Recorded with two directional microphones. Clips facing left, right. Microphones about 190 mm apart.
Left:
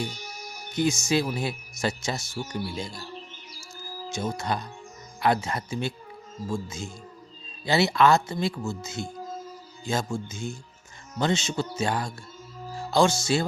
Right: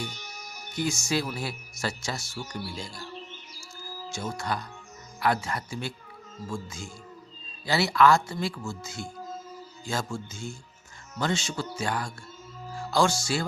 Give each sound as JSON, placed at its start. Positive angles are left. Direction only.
{"t": 0.7, "sound": "speech", "side_deg": 20}
{"t": 4.1, "sound": "speech", "side_deg": 20}